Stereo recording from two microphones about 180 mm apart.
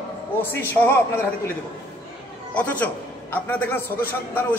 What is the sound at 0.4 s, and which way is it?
Speech, 10° left (ahead or behind).